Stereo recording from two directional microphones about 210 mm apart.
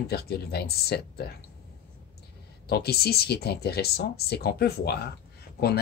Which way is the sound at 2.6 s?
50° left (ahead or behind).